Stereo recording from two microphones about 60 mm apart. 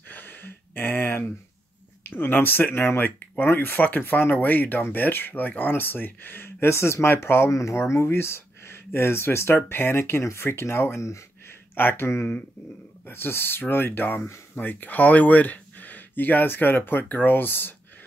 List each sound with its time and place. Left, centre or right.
0.1 s a sound: left
2.0 s speech: left
11.7 s speech: left